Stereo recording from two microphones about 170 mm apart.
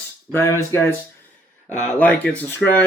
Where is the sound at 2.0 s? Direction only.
10° left (ahead or behind).